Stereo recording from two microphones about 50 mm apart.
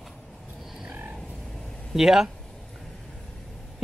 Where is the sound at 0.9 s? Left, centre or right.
Right.